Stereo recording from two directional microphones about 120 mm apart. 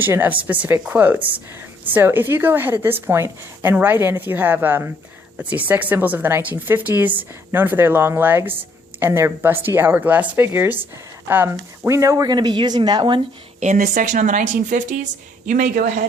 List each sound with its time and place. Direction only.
0.0 s a woman's voice: 15° right (ahead or behind); by 13.2 s 40° right (ahead or behind)
13.6 s speech: 85° right